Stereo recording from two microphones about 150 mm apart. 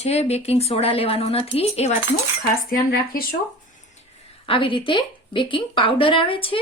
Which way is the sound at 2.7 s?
80° left.